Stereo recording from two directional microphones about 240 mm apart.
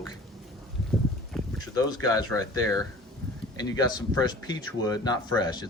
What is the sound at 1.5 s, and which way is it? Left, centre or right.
Speech, centre.